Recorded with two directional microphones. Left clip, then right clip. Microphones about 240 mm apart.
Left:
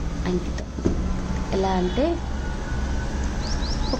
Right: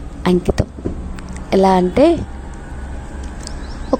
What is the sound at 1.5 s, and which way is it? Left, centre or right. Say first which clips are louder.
Speech: right 11 dB; right.